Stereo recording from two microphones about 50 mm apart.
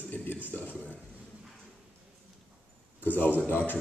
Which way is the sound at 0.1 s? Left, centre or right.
Left.